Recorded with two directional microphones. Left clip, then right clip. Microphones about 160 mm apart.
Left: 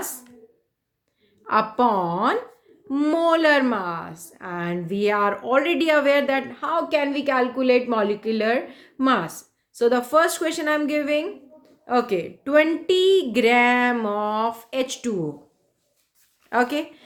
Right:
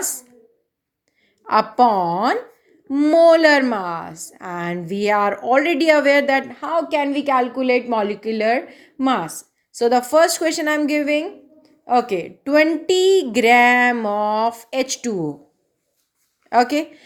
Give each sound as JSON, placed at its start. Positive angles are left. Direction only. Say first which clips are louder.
{"t": 1.5, "sound": "a woman's voice", "louder": "right 5 dB", "side_deg": -40}
{"t": 16.5, "sound": "a woman's voice", "louder": "right 5 dB", "side_deg": -40}